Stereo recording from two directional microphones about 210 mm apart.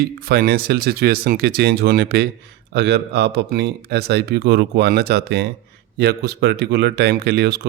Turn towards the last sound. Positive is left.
turn(degrees=-50)  # may be behind; listen again after turning